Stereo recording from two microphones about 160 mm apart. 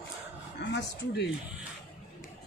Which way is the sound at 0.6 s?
90° left.